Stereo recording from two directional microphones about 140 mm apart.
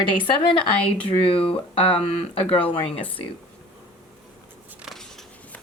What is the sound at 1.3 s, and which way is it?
Speech, 40° left (ahead or behind).